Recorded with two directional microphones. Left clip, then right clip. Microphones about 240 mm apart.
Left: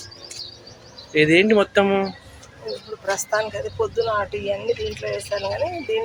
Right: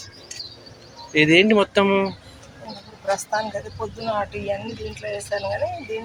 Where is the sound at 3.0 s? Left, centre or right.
Left.